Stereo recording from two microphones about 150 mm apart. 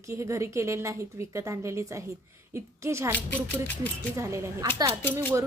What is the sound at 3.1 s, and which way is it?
Speech, 10° left (ahead or behind).